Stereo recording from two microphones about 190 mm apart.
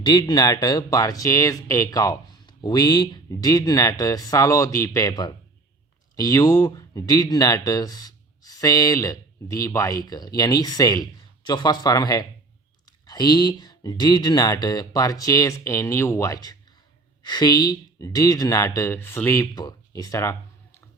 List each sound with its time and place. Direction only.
0.0 s speech: 25° left (ahead or behind)